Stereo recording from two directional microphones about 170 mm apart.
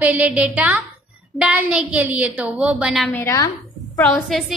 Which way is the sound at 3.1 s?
15° left (ahead or behind).